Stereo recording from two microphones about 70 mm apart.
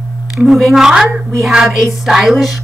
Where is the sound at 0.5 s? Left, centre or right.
Centre.